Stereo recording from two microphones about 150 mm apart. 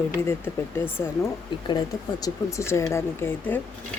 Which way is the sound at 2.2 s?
20° left (ahead or behind).